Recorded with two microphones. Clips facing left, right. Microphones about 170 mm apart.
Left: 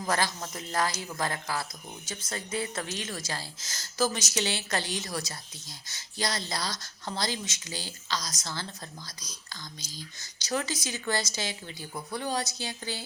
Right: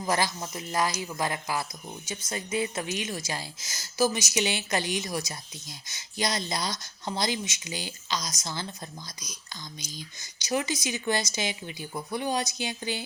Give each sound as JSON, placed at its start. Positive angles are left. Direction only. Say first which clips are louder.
{"t": 0.0, "sound": "a woman's voice", "louder": "right 2 dB", "side_deg": -15}